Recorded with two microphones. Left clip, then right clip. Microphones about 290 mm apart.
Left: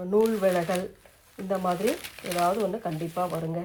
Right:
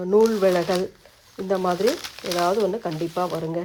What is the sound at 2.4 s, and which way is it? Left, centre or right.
Speech, right.